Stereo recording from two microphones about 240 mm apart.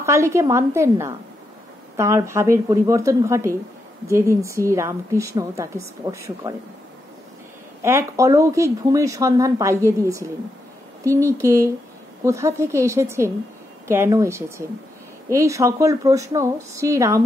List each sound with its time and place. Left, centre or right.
0.0 s speech: centre
7.8 s speech: centre